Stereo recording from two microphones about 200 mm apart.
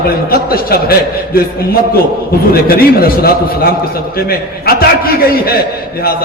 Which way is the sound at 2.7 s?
50° left (ahead or behind).